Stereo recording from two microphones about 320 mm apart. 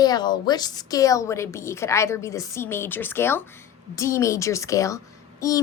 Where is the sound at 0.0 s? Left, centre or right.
Centre.